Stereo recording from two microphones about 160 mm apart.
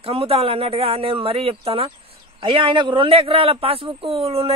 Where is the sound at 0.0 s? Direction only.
35° right (ahead or behind).